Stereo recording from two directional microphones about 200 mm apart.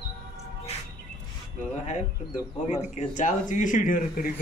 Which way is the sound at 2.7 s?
35° left (ahead or behind).